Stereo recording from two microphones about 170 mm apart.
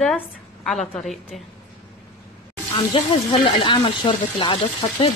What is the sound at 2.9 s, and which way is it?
Speech, 30° left (ahead or behind).